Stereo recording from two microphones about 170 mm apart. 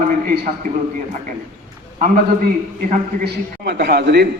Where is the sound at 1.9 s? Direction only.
50° right (ahead or behind); by 4.2 s 75° right (ahead or behind).